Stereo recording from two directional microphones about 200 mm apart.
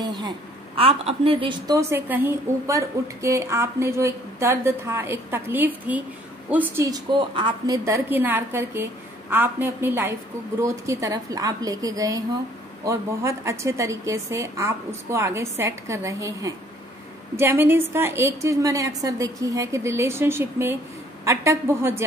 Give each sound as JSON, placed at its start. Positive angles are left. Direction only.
{"t": 0.0, "sound": "a woman's voice", "side_deg": -20}
{"t": 7.2, "sound": "a woman's voice", "side_deg": -25}